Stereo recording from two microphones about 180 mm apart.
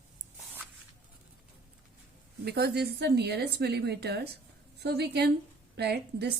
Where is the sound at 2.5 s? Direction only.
65° right (ahead or behind).